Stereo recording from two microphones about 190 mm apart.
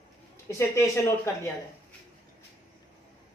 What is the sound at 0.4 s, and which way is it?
Speech, 15° left (ahead or behind).